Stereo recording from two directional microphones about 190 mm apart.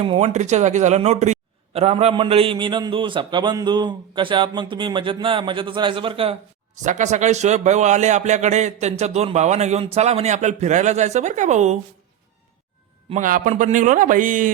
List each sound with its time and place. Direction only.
0.0 s speech: 35° right (ahead or behind)
6.8 s a man's voice: 40° right (ahead or behind)
13.1 s a man's voice: 40° right (ahead or behind)